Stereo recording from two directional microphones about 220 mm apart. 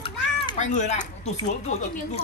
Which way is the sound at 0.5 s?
30° left (ahead or behind).